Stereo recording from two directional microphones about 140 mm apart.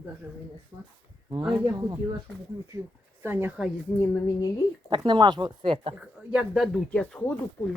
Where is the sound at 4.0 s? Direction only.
25° left (ahead or behind).